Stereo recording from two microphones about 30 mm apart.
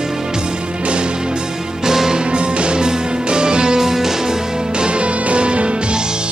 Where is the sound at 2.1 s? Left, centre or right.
Right; by 4.4 s centre.